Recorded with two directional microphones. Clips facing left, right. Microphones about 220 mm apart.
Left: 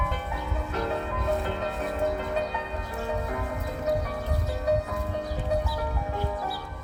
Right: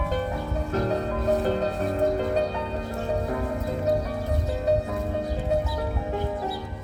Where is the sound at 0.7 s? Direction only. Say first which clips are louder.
Right 5 dB; 40° right (ahead or behind).